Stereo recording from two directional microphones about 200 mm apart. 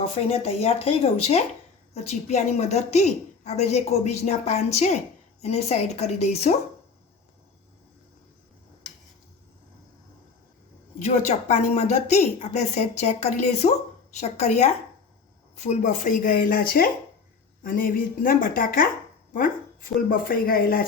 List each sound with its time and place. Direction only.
0.0 s a woman's voice: 30° left (ahead or behind)
11.0 s a woman's voice: 35° left (ahead or behind)